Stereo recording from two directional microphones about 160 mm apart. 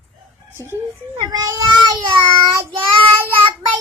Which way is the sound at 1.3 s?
20° right (ahead or behind).